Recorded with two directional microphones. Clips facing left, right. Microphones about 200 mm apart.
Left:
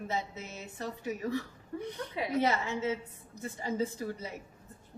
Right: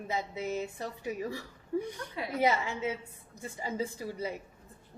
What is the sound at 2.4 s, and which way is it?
Speech, 15° right (ahead or behind).